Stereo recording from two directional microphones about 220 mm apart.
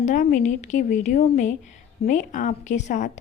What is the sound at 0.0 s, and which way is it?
Speech, 35° left (ahead or behind).